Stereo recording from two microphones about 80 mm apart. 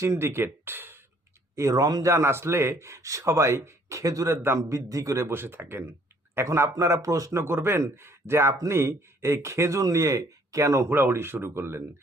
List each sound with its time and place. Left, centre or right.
0.0 s speech: right
1.5 s a man's voice: right
7.4 s a man's voice: right